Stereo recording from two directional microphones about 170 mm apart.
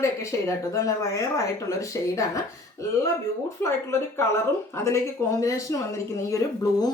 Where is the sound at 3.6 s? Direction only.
15° left (ahead or behind).